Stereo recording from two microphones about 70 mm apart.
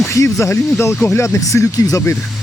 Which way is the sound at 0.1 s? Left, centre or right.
Left.